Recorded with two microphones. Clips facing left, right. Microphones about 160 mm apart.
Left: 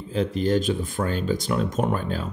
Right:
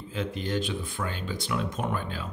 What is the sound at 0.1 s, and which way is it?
Speech, 35° left (ahead or behind).